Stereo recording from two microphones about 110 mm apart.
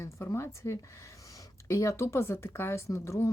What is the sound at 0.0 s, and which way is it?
Speech, 25° left (ahead or behind).